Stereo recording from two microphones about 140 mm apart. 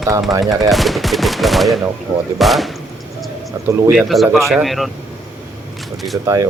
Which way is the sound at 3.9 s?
Centre (ahead or behind).